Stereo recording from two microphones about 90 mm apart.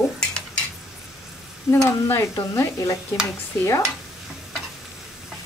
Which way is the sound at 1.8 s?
30° left (ahead or behind).